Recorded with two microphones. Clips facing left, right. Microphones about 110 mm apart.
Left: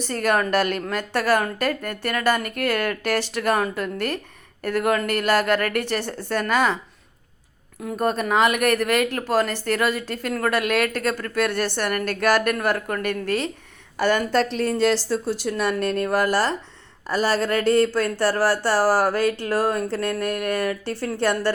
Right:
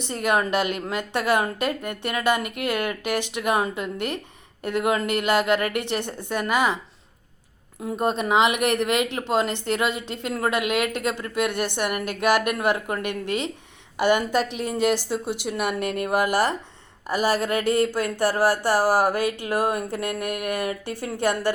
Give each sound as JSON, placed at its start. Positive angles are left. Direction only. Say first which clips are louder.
{"t": 0.0, "sound": "speech", "louder": "left 1 dB", "side_deg": -20}
{"t": 7.8, "sound": "speech", "louder": "left 1 dB", "side_deg": -25}